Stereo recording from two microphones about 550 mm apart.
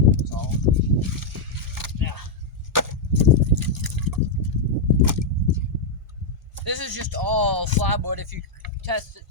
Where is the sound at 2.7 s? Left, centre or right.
Right.